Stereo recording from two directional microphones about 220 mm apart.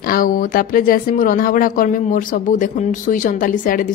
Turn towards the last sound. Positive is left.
turn(degrees=35)  # may be behind; listen again after turning